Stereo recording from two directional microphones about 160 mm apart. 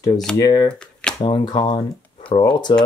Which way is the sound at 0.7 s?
5° left (ahead or behind).